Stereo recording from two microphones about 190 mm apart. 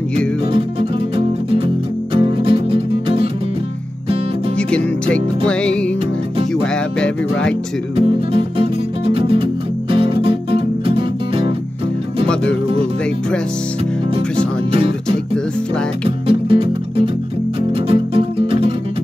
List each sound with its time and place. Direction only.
0.5 s music: 30° right (ahead or behind)
4.6 s music: 5° left (ahead or behind)
7.9 s music: 30° right (ahead or behind)
14.7 s music: 30° right (ahead or behind)
16.3 s music: 30° right (ahead or behind)